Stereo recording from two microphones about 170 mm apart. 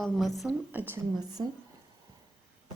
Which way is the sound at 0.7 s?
10° right (ahead or behind).